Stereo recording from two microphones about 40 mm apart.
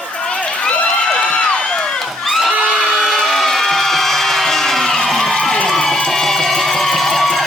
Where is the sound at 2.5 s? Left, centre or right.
Centre.